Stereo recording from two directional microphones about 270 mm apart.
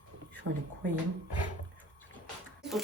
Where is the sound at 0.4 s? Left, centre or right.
Right.